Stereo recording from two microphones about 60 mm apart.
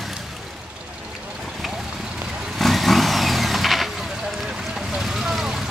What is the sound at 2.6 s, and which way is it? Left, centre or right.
Vehicle, centre.